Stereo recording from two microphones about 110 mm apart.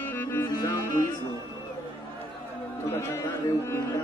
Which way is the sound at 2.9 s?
20° left (ahead or behind).